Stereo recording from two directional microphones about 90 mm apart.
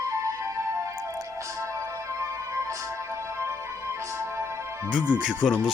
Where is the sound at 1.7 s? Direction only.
35° right (ahead or behind).